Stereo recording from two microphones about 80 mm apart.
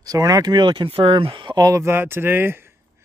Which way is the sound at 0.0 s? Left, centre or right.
Right.